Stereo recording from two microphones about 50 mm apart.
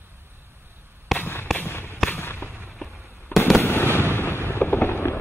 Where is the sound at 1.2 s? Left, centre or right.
Left.